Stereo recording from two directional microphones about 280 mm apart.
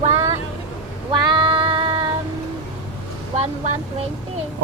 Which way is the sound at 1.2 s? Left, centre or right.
Centre.